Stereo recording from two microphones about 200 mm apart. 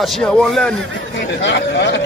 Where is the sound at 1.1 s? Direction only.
65° left (ahead or behind).